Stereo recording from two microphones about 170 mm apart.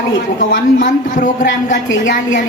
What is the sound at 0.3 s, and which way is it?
A woman's voice, 50° left (ahead or behind).